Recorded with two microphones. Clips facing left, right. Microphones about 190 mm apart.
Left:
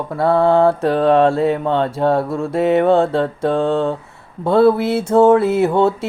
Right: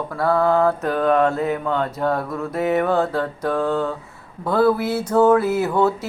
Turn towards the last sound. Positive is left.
turn(degrees=25)  # may be behind; listen again after turning